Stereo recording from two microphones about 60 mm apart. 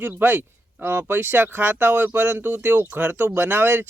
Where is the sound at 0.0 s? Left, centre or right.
Right.